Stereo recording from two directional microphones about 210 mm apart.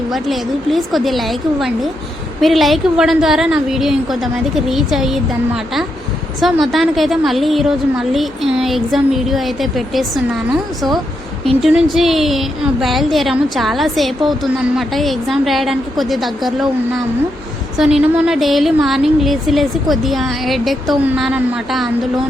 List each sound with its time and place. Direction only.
0.1 s a woman's voice: centre (ahead or behind)
6.4 s a woman's voice: centre (ahead or behind)
11.6 s a woman's voice: 5° right (ahead or behind)
17.7 s a woman's voice: 5° right (ahead or behind)